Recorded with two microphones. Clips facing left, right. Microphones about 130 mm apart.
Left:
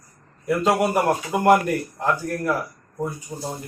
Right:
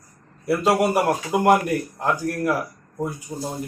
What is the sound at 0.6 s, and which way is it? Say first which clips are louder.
Speech: right 1 dB; 5° right (ahead or behind).